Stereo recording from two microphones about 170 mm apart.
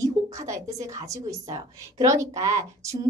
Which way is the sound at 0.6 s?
20° right (ahead or behind).